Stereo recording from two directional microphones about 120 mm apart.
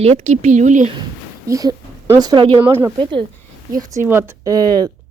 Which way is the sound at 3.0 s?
45° right (ahead or behind).